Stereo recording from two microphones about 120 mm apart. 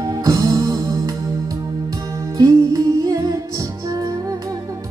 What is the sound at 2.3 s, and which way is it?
Music, 30° right (ahead or behind).